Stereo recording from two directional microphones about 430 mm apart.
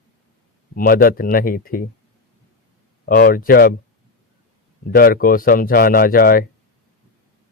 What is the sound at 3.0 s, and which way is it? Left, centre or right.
Speech, centre.